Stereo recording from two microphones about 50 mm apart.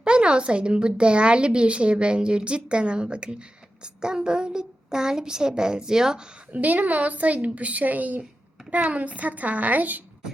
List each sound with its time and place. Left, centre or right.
0.0 s a woman's voice: centre
6.5 s a woman's voice: right